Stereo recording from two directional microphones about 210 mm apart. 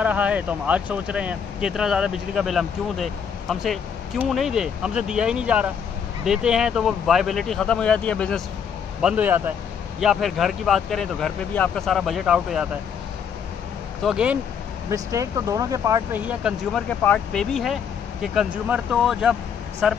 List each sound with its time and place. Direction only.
0.0 s speech: 5° right (ahead or behind)
9.0 s speech: 5° right (ahead or behind)
14.0 s speech: 5° right (ahead or behind)
14.9 s speech: 15° right (ahead or behind)
17.0 s speech: 5° left (ahead or behind)